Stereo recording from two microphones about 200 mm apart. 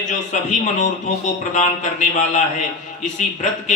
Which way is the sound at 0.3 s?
35° left (ahead or behind).